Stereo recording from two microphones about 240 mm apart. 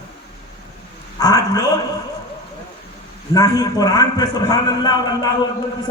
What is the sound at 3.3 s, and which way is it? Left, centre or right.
A man's voice, centre.